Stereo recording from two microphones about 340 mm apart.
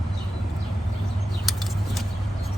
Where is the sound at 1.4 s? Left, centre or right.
Centre.